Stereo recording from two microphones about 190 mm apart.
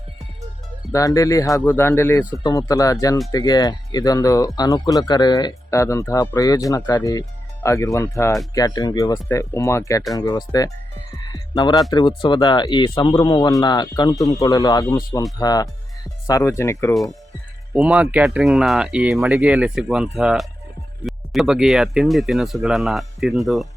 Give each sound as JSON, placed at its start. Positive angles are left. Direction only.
{"t": 0.9, "sound": "speech", "side_deg": 15}
{"t": 16.9, "sound": "speech", "side_deg": 0}